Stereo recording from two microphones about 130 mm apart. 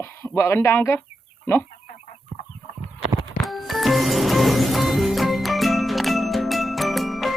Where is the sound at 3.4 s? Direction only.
Centre (ahead or behind).